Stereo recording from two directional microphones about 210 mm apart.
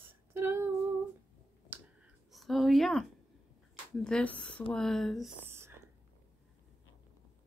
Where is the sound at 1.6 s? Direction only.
5° right (ahead or behind).